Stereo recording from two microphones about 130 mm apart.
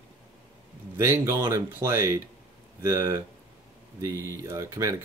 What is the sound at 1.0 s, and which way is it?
Speech, 20° right (ahead or behind).